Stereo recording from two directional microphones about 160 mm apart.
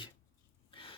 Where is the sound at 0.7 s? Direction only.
35° left (ahead or behind).